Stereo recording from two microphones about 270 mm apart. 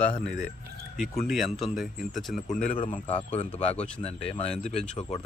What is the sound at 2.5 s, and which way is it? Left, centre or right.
Speech, left.